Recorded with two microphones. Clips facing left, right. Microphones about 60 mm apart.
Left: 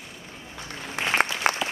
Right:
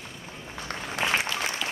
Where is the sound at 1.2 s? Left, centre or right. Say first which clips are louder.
Left 7 dB; left.